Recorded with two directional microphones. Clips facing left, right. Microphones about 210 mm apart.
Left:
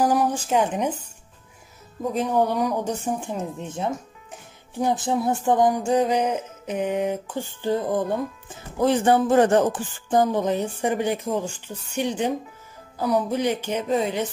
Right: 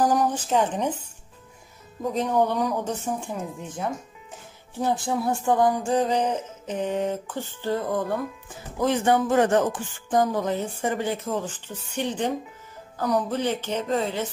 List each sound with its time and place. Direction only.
0.0 s a sound: 10° left (ahead or behind)
2.1 s music: 10° left (ahead or behind)
8.8 s speech: 35° left (ahead or behind); by 12.4 s 10° left (ahead or behind)
12.9 s music: 10° left (ahead or behind)